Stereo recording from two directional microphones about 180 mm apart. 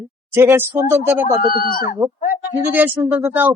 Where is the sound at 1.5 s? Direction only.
55° left (ahead or behind).